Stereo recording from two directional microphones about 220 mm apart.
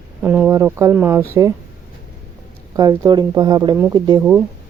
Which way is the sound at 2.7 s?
15° right (ahead or behind).